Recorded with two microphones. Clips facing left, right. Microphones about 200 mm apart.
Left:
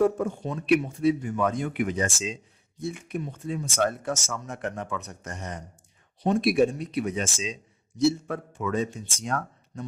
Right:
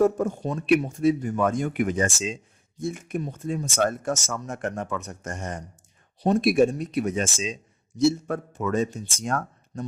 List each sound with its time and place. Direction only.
0.0 s speech: 45° right (ahead or behind)